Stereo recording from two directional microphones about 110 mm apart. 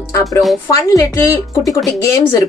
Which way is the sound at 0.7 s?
30° left (ahead or behind).